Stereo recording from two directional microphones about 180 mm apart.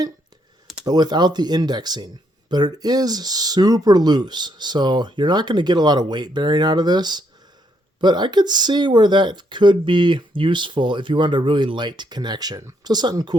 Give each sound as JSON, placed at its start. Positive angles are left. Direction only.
{"t": 0.9, "sound": "speech", "side_deg": -25}